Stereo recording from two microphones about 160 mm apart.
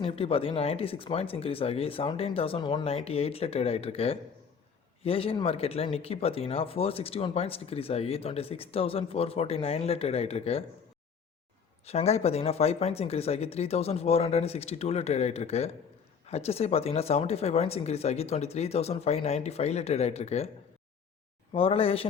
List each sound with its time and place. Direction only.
0.0 s speech: 35° left (ahead or behind)
11.9 s speech: 40° left (ahead or behind)
21.5 s speech: 35° left (ahead or behind)